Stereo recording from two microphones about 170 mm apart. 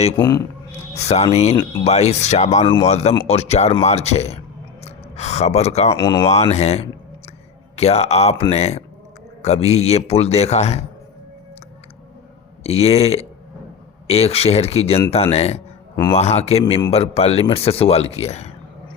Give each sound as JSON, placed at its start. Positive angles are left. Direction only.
{"t": 0.2, "sound": "speech", "side_deg": 20}
{"t": 0.9, "sound": "speech", "side_deg": 40}
{"t": 6.0, "sound": "speech", "side_deg": 25}
{"t": 6.2, "sound": "speech", "side_deg": 40}
{"t": 12.6, "sound": "speech", "side_deg": 35}